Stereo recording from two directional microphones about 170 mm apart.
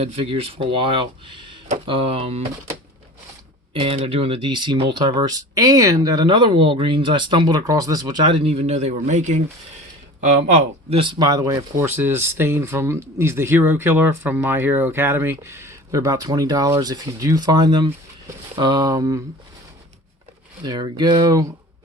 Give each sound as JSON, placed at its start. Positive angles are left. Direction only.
{"t": 0.0, "sound": "speech", "side_deg": -35}
{"t": 3.8, "sound": "speech", "side_deg": -35}
{"t": 10.5, "sound": "speech", "side_deg": -35}
{"t": 20.7, "sound": "speech", "side_deg": -25}